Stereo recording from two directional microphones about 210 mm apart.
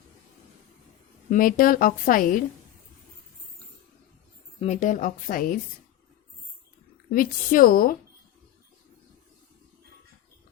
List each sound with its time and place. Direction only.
1.3 s a woman's voice: 40° left (ahead or behind)
4.6 s a woman's voice: 35° left (ahead or behind)
7.1 s a woman's voice: 40° left (ahead or behind)